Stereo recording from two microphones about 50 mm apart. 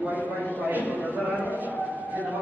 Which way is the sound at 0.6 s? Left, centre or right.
Right.